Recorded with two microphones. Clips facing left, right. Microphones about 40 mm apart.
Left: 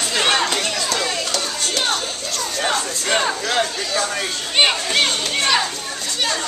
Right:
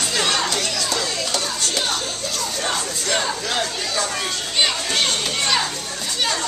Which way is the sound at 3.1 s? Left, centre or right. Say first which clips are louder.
Left 3 dB; left.